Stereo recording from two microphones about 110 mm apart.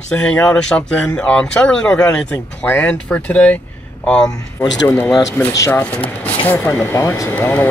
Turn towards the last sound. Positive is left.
turn(degrees=20)  # may be behind; listen again after turning